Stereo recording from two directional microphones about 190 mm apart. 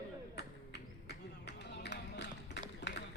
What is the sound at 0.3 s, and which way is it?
Music, 60° left (ahead or behind).